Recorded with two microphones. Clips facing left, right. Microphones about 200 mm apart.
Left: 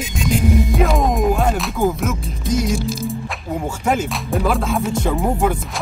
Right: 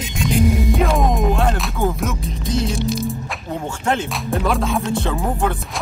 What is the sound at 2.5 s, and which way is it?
Speech, 10° left (ahead or behind).